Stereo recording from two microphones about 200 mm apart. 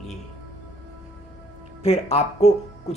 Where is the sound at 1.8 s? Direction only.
30° left (ahead or behind).